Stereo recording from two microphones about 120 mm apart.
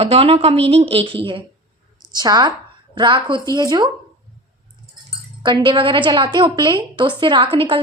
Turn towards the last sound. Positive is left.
turn(degrees=-50)  # may be behind; listen again after turning